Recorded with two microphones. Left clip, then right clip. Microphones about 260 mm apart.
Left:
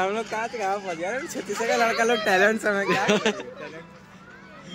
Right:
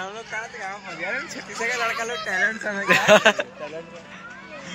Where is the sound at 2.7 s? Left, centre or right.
Centre.